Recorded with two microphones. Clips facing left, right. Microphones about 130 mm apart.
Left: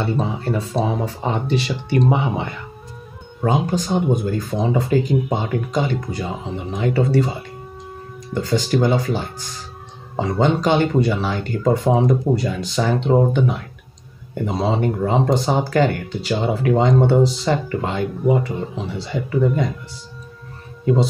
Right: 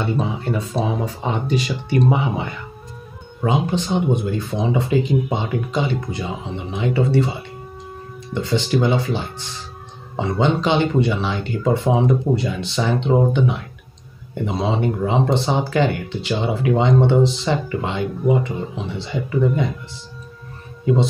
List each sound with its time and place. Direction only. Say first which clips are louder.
0.0 s speech: even; 30° left (ahead or behind)
3.4 s speech: left 1 dB; 45° left (ahead or behind)
8.4 s speech: left 1 dB; 40° left (ahead or behind)
20.8 s speech: even; 40° left (ahead or behind)